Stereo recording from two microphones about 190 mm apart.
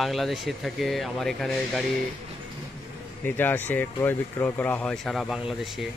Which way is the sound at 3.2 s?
10° left (ahead or behind).